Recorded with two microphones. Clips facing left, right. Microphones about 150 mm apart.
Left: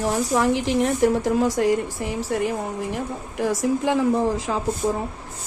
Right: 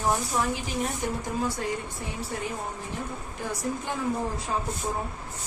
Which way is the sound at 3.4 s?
90° left.